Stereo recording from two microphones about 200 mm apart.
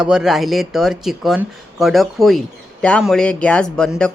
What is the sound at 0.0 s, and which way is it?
Speech, 5° right (ahead or behind).